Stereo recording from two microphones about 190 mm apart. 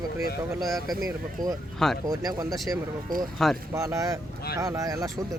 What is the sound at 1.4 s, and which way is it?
Speech, 45° right (ahead or behind).